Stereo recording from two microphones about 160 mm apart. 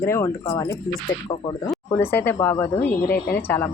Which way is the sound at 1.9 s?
15° left (ahead or behind).